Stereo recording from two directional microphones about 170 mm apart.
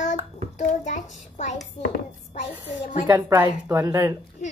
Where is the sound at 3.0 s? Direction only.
20° right (ahead or behind).